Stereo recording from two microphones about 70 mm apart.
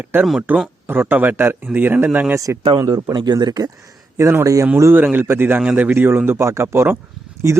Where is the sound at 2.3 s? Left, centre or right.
Right.